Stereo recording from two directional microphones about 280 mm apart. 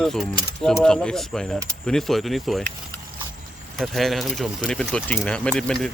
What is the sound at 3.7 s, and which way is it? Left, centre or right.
Speech, centre.